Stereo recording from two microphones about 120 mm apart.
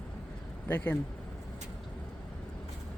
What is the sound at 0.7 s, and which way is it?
Speech, 15° left (ahead or behind).